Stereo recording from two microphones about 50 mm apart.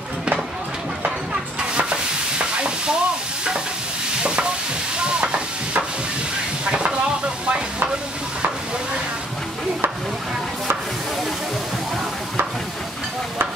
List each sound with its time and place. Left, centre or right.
1.0 s stir: centre
4.2 s stir: centre
4.9 s a sound: centre
6.6 s vehicle: right